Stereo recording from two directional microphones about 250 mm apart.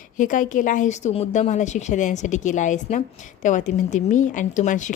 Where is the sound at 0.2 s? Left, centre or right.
Left.